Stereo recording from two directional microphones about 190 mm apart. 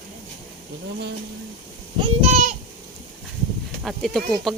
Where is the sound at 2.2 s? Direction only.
35° right (ahead or behind).